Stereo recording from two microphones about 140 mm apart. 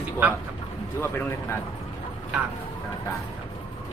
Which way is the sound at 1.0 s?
15° left (ahead or behind).